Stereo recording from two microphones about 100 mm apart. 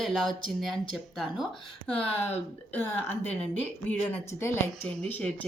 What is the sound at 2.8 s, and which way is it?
Speech, 15° left (ahead or behind).